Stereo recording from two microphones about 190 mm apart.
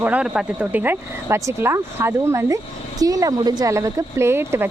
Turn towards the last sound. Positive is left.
turn(degrees=-10)  # may be behind; listen again after turning